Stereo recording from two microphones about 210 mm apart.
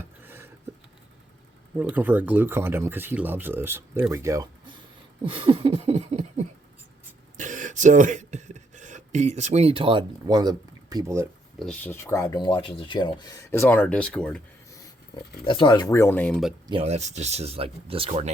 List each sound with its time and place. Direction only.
0.2 s a sound: 10° right (ahead or behind)
1.8 s speech: 10° right (ahead or behind)
5.2 s a sound: 25° right (ahead or behind)
11.6 s speech: 5° left (ahead or behind)
15.4 s speech: 20° left (ahead or behind); by 16.6 s centre (ahead or behind)
16.6 s speech: 30° right (ahead or behind)